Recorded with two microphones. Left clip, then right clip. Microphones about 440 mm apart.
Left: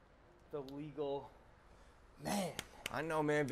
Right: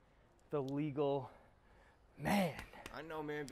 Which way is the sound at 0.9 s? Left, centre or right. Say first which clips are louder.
Right 3 dB; right.